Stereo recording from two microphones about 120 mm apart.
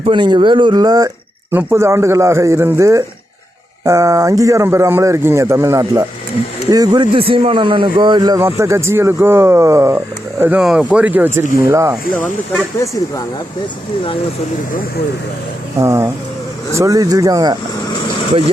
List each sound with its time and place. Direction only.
0.0 s a man's voice: 45° right (ahead or behind)
8.4 s speech: 20° right (ahead or behind)
10.4 s speech: 10° right (ahead or behind)
15.8 s speech: 20° right (ahead or behind)